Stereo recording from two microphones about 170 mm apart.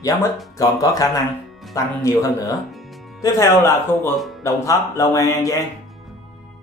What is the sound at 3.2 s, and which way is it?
Music, 15° left (ahead or behind).